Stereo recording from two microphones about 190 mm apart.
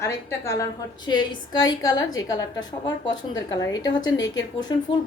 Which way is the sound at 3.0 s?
20° left (ahead or behind).